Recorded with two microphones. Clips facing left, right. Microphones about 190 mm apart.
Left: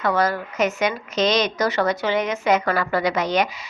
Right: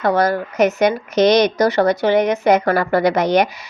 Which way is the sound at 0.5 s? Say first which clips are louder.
Right 7 dB; 65° right (ahead or behind).